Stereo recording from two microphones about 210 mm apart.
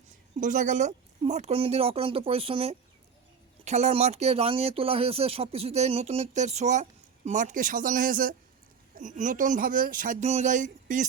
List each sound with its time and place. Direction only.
0.3 s speech: 35° right (ahead or behind)